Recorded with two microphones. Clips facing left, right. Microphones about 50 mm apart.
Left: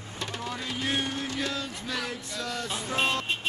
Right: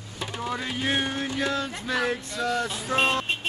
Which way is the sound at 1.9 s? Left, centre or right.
Right.